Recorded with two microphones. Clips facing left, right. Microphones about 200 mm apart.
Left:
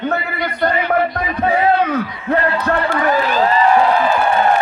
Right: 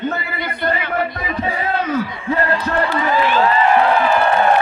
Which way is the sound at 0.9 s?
55° left (ahead or behind).